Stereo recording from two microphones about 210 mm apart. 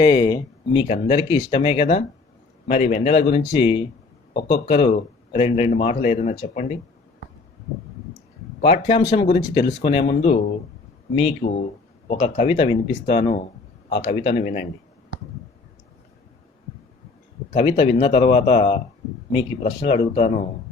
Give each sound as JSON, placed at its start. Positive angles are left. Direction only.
{"t": 0.0, "sound": "speech", "side_deg": 20}
{"t": 8.6, "sound": "speech", "side_deg": 30}
{"t": 17.5, "sound": "speech", "side_deg": 30}